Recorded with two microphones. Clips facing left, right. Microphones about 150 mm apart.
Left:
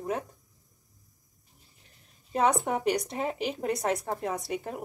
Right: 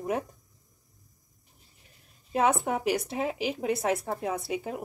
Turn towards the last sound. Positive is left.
turn(degrees=0)  # may be behind; listen again after turning